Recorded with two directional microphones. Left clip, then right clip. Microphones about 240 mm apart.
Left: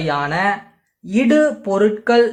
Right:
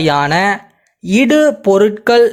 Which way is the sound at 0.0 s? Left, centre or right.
Right.